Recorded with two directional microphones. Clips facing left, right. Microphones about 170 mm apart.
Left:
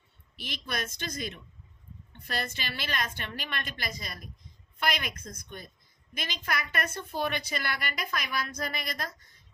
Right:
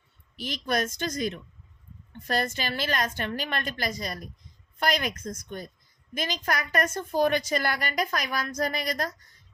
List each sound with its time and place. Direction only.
0.3 s a woman's voice: 45° right (ahead or behind)